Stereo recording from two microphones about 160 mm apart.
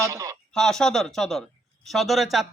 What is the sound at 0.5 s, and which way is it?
Speech, 5° left (ahead or behind).